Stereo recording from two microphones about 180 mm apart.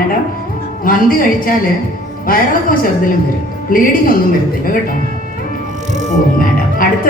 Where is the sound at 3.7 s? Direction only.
50° left (ahead or behind).